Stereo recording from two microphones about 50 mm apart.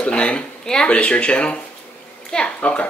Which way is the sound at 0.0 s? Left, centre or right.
Left.